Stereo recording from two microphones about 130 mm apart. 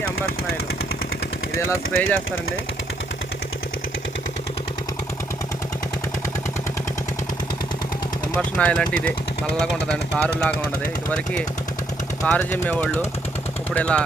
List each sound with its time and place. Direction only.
1.5 s speech: 20° left (ahead or behind)
8.4 s speech: 5° left (ahead or behind)
12.2 s speech: 10° left (ahead or behind)